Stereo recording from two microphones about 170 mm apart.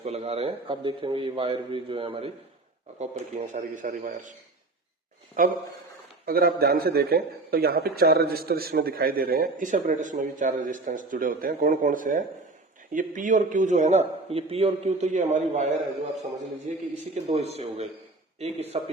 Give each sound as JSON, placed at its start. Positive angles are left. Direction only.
{"t": 0.0, "sound": "a man's voice", "side_deg": -40}
{"t": 3.0, "sound": "a man's voice", "side_deg": -45}
{"t": 5.4, "sound": "a man's voice", "side_deg": -50}